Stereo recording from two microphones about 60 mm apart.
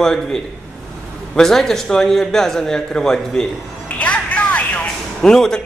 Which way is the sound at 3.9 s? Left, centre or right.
Left.